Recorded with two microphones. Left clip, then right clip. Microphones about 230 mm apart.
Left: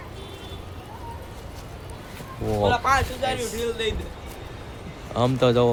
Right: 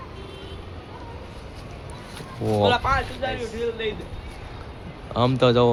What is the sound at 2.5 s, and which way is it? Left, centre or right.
Speech, centre.